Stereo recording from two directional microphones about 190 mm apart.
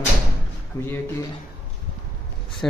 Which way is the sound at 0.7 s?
15° left (ahead or behind).